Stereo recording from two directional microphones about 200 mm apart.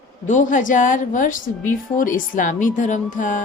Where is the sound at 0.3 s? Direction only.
40° left (ahead or behind).